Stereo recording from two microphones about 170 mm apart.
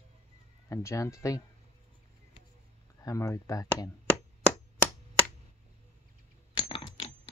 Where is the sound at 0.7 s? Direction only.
20° left (ahead or behind).